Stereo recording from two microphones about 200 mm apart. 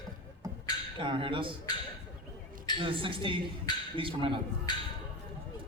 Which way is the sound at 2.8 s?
25° right (ahead or behind).